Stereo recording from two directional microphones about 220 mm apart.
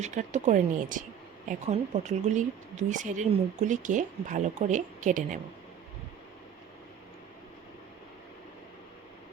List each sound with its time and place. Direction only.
0.0 s speech: 30° right (ahead or behind)